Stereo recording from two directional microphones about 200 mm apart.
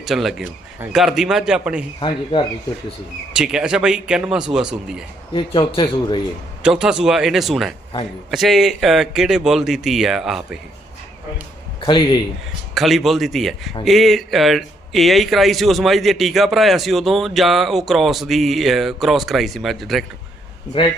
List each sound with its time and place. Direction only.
0.0 s speech: centre (ahead or behind)
2.0 s speech: 25° left (ahead or behind)
3.3 s speech: 5° right (ahead or behind)
5.3 s speech: 25° left (ahead or behind)
6.6 s speech: 5° right (ahead or behind)
11.8 s speech: 25° left (ahead or behind)
12.7 s speech: centre (ahead or behind)
20.7 s speech: 25° left (ahead or behind)